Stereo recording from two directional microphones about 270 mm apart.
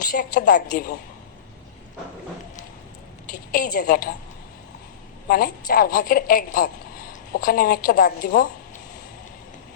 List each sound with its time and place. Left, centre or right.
0.0 s speech: left
3.5 s speech: left
5.3 s speech: left